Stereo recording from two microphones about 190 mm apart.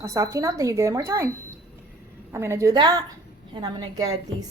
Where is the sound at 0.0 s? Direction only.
15° right (ahead or behind).